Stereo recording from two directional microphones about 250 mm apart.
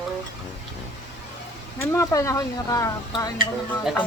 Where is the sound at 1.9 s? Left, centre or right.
Centre.